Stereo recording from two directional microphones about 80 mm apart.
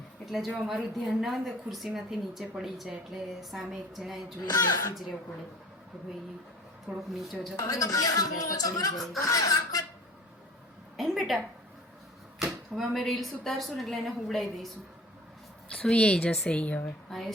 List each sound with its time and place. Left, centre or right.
0.3 s a woman's voice: centre
6.8 s a woman's voice: centre
7.5 s speech: left
10.9 s a sound: centre
12.4 s a woman's voice: centre
15.7 s a woman's voice: centre
17.1 s a woman's voice: centre